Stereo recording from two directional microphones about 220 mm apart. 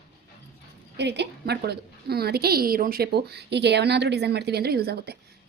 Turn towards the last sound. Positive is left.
turn(degrees=-45)  # may be behind; listen again after turning